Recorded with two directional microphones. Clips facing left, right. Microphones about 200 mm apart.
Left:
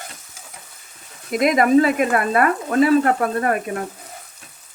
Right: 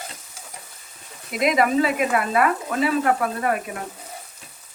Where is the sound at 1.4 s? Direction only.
50° left (ahead or behind).